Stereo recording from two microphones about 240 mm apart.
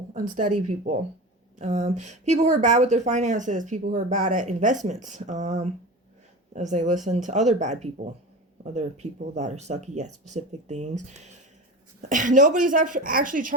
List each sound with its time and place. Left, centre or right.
0.1 s speech: right
1.5 s speech: right